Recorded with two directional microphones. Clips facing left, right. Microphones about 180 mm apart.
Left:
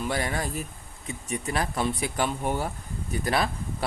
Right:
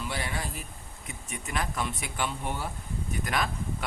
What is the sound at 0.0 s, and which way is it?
Speech, 45° left (ahead or behind).